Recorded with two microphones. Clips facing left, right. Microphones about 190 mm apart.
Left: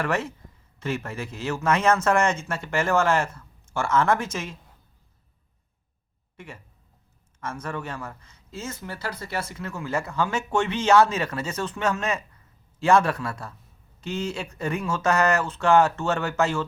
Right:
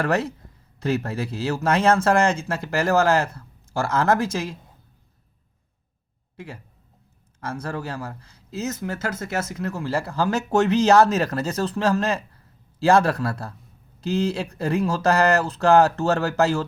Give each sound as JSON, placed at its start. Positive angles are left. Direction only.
{"t": 0.0, "sound": "speech", "side_deg": -35}
{"t": 6.3, "sound": "speech", "side_deg": -35}